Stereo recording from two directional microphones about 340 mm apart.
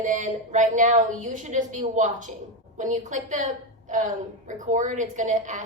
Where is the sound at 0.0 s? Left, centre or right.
Right.